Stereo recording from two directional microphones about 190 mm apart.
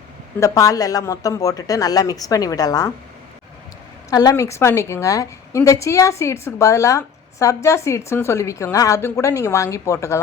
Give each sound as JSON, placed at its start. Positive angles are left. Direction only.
{"t": 0.3, "sound": "speech", "side_deg": 15}
{"t": 4.1, "sound": "a woman's voice", "side_deg": 20}